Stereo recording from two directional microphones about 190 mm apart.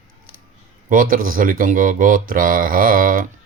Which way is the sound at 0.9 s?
45° right (ahead or behind).